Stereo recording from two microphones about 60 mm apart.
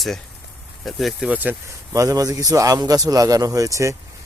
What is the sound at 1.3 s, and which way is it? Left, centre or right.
Speech, right.